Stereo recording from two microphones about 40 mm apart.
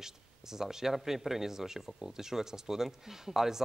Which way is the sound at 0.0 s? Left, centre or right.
Centre.